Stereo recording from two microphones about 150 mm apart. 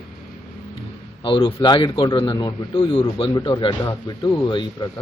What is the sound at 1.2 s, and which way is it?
A man's voice, 35° left (ahead or behind).